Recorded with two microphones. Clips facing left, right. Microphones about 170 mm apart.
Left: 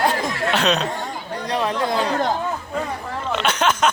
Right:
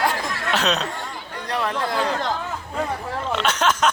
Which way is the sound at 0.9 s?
15° left (ahead or behind).